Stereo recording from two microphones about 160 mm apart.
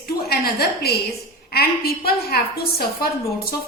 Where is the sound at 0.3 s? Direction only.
75° left (ahead or behind).